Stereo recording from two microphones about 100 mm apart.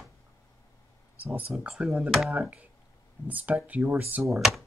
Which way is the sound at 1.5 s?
5° right (ahead or behind).